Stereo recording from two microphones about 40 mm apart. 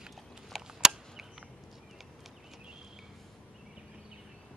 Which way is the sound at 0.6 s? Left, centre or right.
Centre.